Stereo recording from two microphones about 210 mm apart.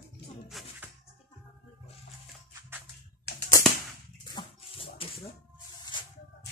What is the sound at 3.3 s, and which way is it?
Typewriter, 50° left (ahead or behind).